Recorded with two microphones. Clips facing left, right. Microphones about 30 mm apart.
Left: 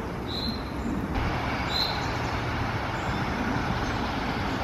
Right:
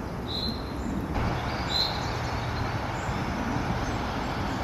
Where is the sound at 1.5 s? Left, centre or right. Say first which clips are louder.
Even; centre.